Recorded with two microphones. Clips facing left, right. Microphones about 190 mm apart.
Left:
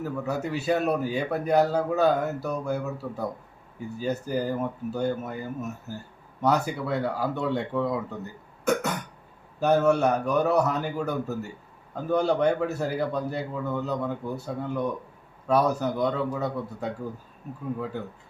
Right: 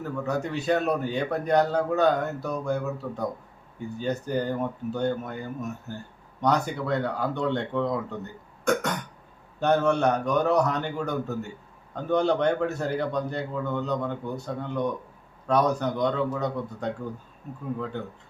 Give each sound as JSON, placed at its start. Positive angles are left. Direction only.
{"t": 0.0, "sound": "a man's voice", "side_deg": 5}